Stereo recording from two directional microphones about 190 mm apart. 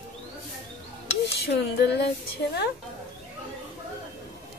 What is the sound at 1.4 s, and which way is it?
Speech, 65° left (ahead or behind).